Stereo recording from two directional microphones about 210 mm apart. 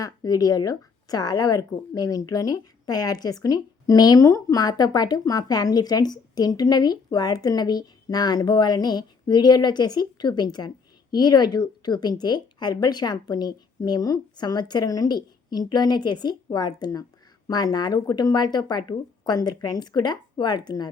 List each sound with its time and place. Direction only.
0.0 s a woman's voice: 15° left (ahead or behind)